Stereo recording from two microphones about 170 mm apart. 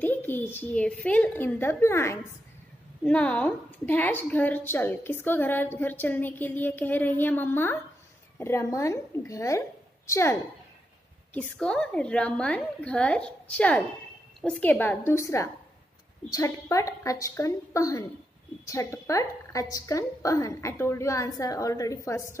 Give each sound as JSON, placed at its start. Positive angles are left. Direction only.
{"t": 0.0, "sound": "a woman's voice", "side_deg": 10}
{"t": 11.3, "sound": "a woman's voice", "side_deg": 5}